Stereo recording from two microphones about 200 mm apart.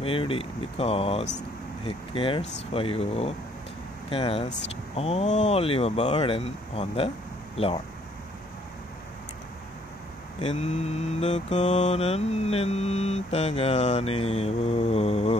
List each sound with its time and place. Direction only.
0.0 s speech: 25° left (ahead or behind)
10.4 s mantra: 35° left (ahead or behind)